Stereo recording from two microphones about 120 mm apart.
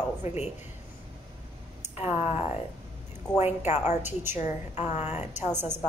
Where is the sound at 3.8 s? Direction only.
20° right (ahead or behind).